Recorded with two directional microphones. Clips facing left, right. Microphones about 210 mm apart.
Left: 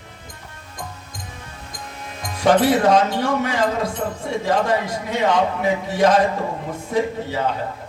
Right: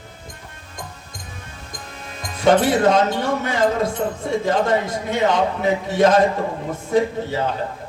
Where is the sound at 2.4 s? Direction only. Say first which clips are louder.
Even; 25° right (ahead or behind).